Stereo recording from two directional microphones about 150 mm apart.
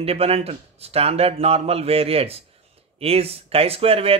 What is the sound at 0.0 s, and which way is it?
A man's voice, 40° right (ahead or behind).